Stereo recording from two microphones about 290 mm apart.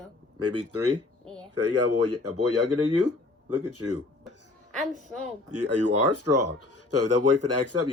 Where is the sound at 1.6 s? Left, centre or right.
Right.